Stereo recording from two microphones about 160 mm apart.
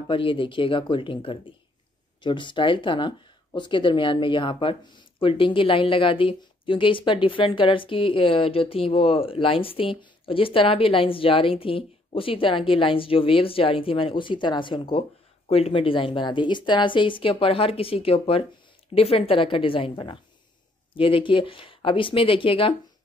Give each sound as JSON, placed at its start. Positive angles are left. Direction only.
{"t": 0.1, "sound": "speech", "side_deg": 30}